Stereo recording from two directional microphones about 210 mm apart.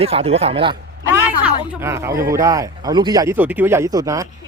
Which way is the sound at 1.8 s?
10° right (ahead or behind).